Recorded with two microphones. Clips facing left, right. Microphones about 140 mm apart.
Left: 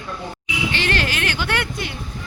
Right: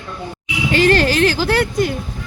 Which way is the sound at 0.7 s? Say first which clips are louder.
Right 13 dB; 40° right (ahead or behind).